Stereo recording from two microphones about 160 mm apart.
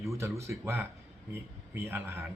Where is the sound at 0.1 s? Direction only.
15° right (ahead or behind).